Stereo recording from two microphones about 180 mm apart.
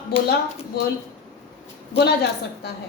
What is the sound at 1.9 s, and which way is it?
Speech, 65° left (ahead or behind).